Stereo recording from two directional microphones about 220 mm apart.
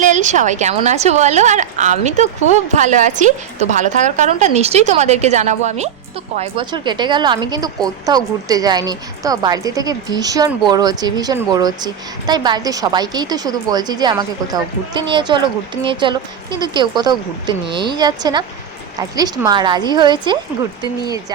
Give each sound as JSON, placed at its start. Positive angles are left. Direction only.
{"t": 0.0, "sound": "a woman's voice", "side_deg": -35}